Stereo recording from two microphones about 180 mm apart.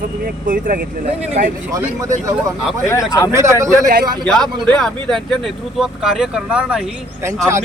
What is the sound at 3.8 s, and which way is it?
Speech, 55° right (ahead or behind).